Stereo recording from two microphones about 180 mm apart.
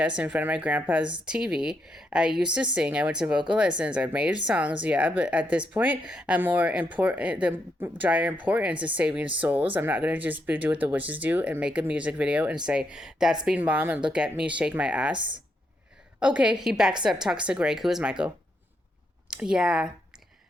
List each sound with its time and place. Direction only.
0.2 s speech: 10° right (ahead or behind)
15.1 s speech: 25° right (ahead or behind)
16.2 s speech: 5° right (ahead or behind)
19.3 s speech: 5° right (ahead or behind)